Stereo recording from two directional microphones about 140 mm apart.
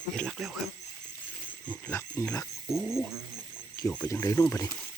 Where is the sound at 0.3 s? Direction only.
Centre (ahead or behind).